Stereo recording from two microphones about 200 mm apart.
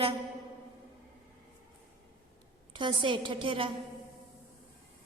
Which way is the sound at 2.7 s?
25° right (ahead or behind).